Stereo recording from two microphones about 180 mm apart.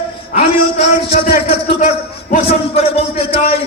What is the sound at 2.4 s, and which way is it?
Music, 35° left (ahead or behind).